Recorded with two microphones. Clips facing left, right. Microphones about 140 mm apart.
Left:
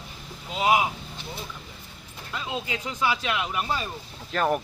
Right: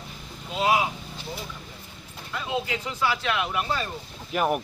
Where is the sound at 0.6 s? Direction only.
15° left (ahead or behind).